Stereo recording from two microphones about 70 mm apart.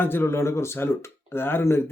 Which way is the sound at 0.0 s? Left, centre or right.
Left.